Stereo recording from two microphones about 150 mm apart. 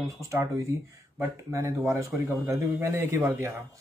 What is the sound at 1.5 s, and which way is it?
A man's voice, 20° right (ahead or behind).